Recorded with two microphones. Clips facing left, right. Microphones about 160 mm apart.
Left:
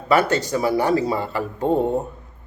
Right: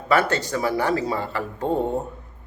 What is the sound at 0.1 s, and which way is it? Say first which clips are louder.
A man's voice: left 2 dB; 15° left (ahead or behind).